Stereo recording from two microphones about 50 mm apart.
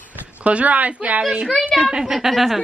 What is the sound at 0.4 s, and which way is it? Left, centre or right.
Speech, right.